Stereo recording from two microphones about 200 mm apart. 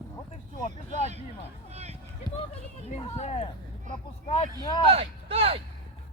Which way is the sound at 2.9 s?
30° left (ahead or behind).